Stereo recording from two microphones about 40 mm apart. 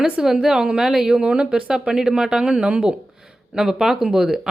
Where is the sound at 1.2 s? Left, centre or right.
Right.